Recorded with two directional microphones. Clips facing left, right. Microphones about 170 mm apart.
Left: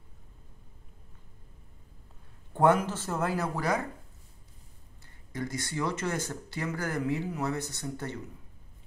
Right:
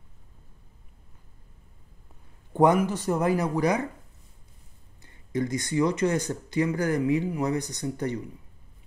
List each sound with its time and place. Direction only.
2.5 s speech: 15° right (ahead or behind)
5.0 s speech: 20° right (ahead or behind)